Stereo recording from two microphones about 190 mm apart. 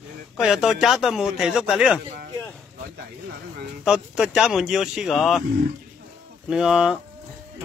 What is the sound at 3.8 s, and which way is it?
Speech, 5° right (ahead or behind).